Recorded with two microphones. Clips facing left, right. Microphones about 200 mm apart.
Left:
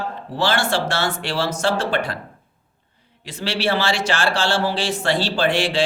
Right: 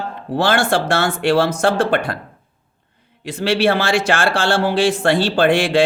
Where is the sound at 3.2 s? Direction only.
55° right (ahead or behind).